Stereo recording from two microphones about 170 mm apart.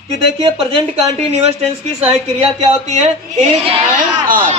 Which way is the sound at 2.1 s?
40° right (ahead or behind).